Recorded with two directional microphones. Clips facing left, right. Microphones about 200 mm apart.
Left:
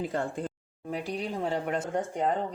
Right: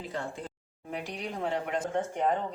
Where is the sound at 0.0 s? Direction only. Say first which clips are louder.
Left 6 dB; 50° left (ahead or behind).